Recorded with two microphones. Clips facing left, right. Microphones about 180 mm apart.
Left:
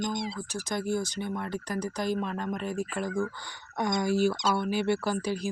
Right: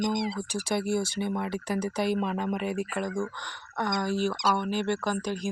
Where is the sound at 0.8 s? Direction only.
70° right (ahead or behind).